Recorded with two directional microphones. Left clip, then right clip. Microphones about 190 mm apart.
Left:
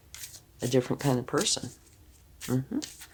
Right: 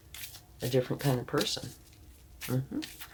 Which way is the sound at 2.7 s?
50° left (ahead or behind).